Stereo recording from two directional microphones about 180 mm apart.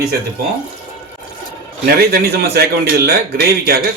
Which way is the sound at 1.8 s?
60° right (ahead or behind).